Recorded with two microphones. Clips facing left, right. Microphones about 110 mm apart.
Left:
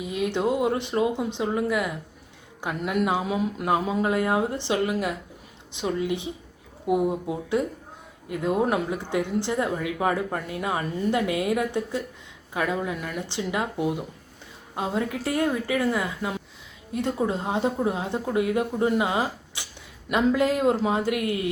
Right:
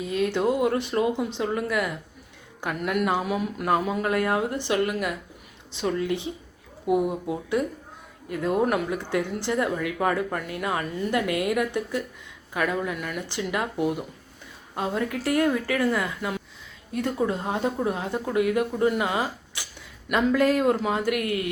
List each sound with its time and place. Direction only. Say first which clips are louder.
0.0 s speech: right 1 dB; 15° left (ahead or behind)